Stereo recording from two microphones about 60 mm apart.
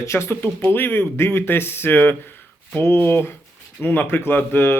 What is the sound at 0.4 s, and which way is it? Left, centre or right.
Speech, left.